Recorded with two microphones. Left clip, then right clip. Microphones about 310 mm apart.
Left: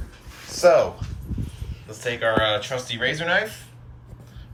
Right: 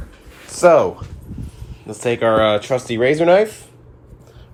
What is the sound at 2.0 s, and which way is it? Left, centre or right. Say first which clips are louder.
Speech: right 7 dB; centre.